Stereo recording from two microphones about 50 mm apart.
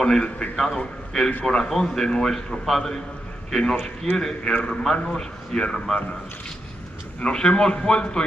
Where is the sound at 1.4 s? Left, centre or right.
Centre.